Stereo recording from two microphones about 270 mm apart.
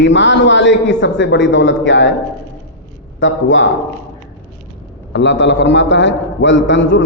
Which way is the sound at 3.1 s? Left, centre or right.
Left.